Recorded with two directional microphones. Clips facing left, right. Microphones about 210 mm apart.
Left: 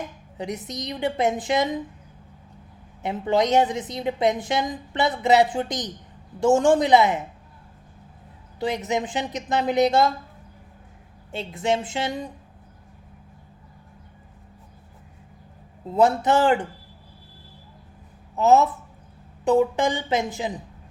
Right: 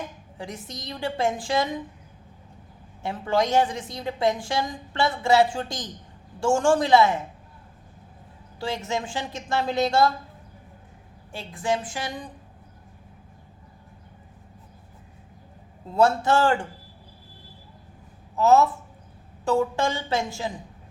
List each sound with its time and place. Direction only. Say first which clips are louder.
0.3 s a woman's voice: left 6 dB; 20° left (ahead or behind)
3.0 s a woman's voice: left 2 dB; 20° left (ahead or behind)
8.5 s a woman's voice: left 4 dB; 20° left (ahead or behind)
11.3 s a woman's voice: left 3 dB; 20° left (ahead or behind)
16.0 s a woman's voice: left 1 dB; 20° left (ahead or behind)
18.3 s a woman's voice: left 1 dB; 20° left (ahead or behind)